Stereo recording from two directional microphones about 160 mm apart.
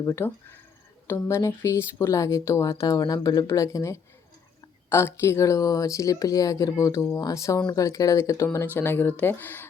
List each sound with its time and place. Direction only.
0.0 s speech: 20° left (ahead or behind)